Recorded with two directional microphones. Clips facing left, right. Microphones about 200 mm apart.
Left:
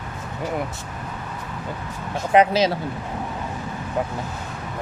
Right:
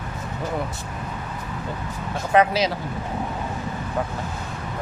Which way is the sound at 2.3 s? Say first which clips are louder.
Left 2 dB; 20° left (ahead or behind).